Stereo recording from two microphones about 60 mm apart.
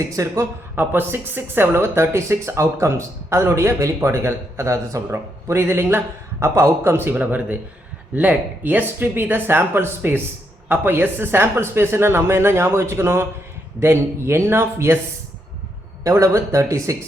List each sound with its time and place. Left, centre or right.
0.0 s speech: right
0.8 s speech: right
5.1 s speech: right
6.9 s a man's voice: right
16.0 s speech: right